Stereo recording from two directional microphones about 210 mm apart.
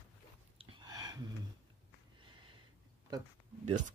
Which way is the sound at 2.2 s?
25° right (ahead or behind).